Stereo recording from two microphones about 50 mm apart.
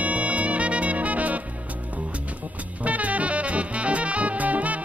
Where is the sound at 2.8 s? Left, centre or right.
Right.